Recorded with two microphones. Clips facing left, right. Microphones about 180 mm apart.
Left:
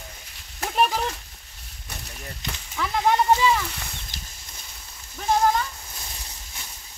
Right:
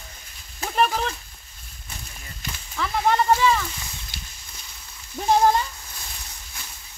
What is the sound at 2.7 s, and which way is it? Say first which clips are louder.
Speech: even; 10° left (ahead or behind).